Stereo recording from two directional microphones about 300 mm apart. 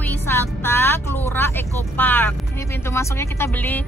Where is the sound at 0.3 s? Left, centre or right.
Centre.